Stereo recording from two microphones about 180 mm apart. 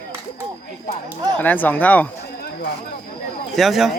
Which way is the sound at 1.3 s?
10° left (ahead or behind).